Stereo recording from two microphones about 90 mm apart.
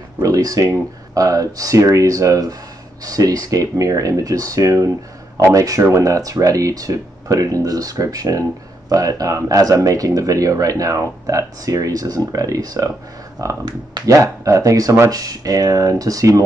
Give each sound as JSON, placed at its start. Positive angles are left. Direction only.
{"t": 0.2, "sound": "speech", "side_deg": -40}